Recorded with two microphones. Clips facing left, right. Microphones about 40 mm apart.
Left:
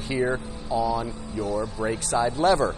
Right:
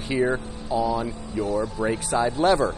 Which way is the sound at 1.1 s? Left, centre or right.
Right.